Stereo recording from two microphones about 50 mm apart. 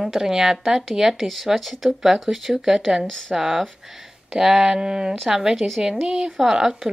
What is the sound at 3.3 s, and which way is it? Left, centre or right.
Speech, centre.